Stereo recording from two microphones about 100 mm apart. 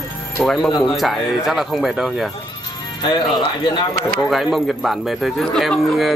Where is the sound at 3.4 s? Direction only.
50° left (ahead or behind).